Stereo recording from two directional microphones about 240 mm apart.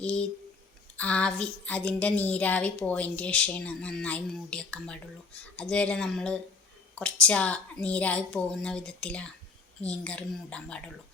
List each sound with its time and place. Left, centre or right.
0.0 s a woman's voice: centre